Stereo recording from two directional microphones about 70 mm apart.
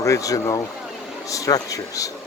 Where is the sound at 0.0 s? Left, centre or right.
Left.